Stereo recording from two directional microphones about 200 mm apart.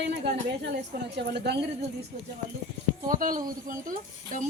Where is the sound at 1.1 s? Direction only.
55° right (ahead or behind).